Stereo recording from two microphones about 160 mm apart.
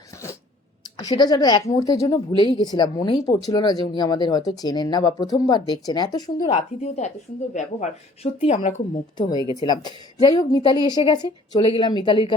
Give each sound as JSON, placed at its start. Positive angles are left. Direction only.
{"t": 0.9, "sound": "a woman's voice", "side_deg": 25}
{"t": 6.5, "sound": "speech", "side_deg": 45}
{"t": 9.6, "sound": "a woman's voice", "side_deg": 25}